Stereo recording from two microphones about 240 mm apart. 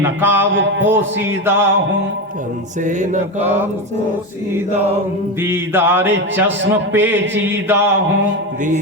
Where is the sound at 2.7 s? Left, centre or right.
Right.